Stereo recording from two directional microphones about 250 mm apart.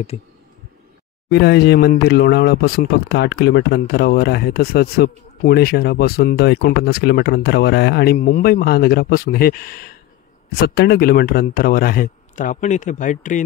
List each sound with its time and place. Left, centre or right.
1.3 s speech: left